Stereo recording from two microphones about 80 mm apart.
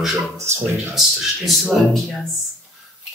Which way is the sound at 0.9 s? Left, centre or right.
Centre.